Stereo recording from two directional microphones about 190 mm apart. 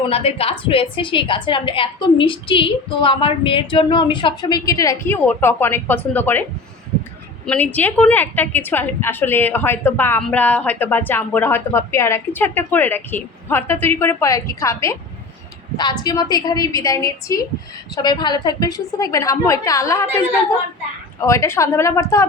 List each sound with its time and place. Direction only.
0.1 s a woman's voice: 30° left (ahead or behind); by 6.4 s 10° left (ahead or behind)
7.4 s a woman's voice: 10° left (ahead or behind)
21.2 s a woman's voice: 15° left (ahead or behind)